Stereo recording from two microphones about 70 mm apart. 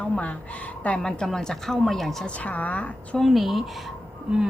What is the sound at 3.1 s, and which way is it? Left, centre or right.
Speech, centre.